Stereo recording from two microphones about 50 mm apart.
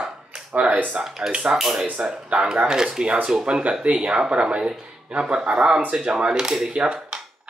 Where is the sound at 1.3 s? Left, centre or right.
Centre.